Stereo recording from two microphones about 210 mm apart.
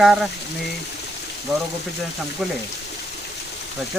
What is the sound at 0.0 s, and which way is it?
Speech, centre (ahead or behind).